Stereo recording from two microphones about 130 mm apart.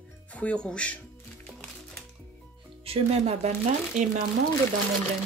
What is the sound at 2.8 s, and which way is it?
Speech, 50° right (ahead or behind).